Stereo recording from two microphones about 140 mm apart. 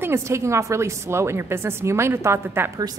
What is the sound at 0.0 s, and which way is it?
A woman's voice, 20° right (ahead or behind).